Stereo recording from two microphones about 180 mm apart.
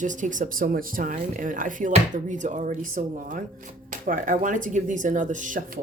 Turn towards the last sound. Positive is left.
turn(degrees=-45)  # may be behind; listen again after turning